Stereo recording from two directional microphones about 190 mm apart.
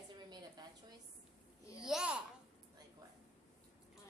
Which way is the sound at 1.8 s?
5° right (ahead or behind).